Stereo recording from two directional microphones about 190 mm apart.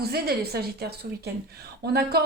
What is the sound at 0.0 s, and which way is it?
A woman's voice, 55° right (ahead or behind).